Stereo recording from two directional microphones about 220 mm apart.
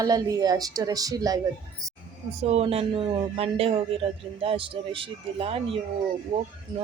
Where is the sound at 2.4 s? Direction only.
30° right (ahead or behind).